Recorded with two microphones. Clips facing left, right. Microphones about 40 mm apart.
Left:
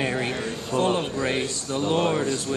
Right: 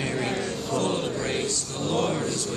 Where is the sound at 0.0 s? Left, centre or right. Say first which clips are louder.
Left 2 dB; left.